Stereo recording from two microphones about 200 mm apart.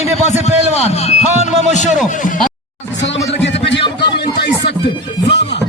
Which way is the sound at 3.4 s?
60° left (ahead or behind).